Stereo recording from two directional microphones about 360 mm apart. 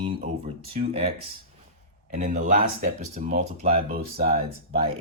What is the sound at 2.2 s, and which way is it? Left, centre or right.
Speech, right.